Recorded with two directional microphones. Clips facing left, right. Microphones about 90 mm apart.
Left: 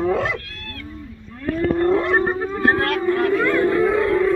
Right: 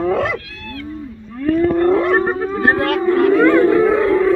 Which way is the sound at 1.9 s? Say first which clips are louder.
Right 3 dB; 5° right (ahead or behind).